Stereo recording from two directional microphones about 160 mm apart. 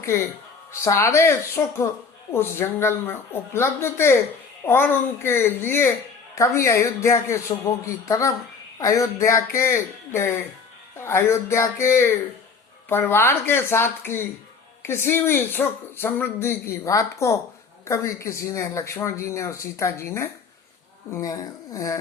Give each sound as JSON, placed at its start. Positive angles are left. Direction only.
{"t": 0.0, "sound": "speech", "side_deg": 15}